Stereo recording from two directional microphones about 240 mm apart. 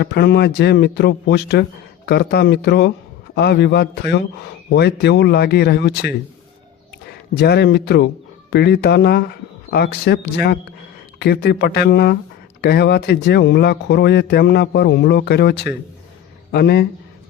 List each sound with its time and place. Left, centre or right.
0.0 s speech: left
7.3 s speech: left